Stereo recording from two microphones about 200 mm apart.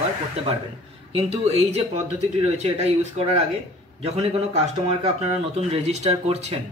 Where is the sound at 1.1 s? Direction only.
30° right (ahead or behind).